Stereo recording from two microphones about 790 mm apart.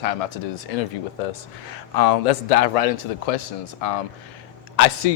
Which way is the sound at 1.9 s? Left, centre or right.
Left.